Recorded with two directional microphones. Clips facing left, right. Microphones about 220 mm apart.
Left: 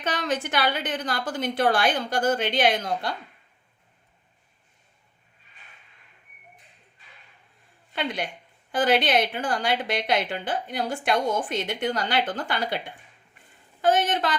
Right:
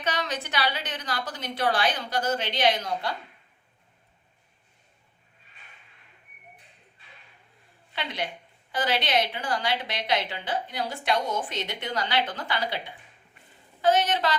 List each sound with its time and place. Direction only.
0.0 s a woman's voice: 50° left (ahead or behind)
7.9 s a woman's voice: 50° left (ahead or behind)